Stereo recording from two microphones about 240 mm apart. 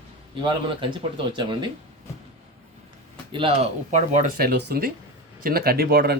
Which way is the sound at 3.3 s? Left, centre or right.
Right.